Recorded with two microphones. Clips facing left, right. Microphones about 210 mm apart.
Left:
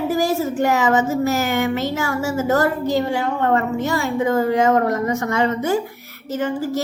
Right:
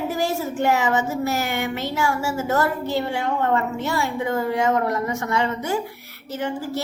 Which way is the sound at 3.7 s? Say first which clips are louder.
Left 4 dB; 45° left (ahead or behind).